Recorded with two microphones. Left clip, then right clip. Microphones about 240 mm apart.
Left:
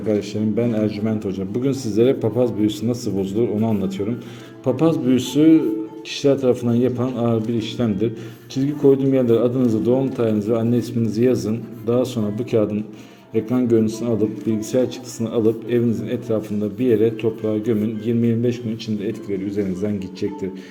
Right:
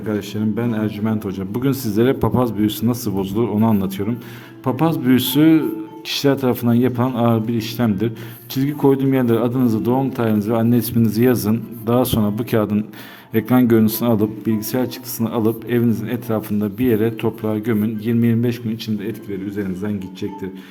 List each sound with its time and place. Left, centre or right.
0.1 s speech: centre
19.0 s a man's voice: centre